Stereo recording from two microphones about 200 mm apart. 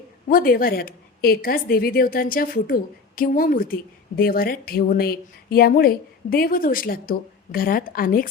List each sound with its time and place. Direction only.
0.3 s a woman's voice: 45° left (ahead or behind)